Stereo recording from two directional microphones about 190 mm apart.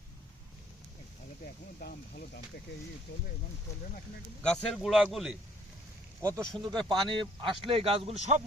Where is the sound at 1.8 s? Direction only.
55° left (ahead or behind).